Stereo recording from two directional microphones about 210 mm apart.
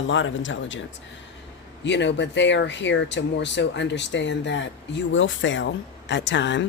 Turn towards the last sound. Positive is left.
turn(degrees=55)  # may be behind; listen again after turning